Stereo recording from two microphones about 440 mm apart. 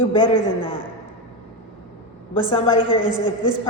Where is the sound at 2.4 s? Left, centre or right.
Centre.